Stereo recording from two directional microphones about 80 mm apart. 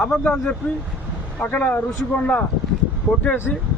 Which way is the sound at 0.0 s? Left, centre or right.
Centre.